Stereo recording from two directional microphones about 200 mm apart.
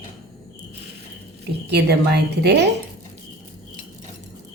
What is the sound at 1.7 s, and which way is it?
A woman's voice, 55° right (ahead or behind).